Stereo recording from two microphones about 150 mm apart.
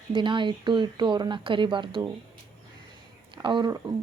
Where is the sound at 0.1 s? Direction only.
35° right (ahead or behind).